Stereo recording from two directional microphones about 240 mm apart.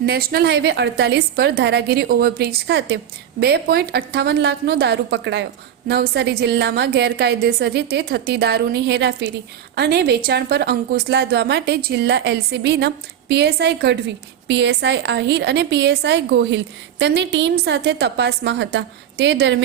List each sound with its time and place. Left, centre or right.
0.0 s a woman's voice: right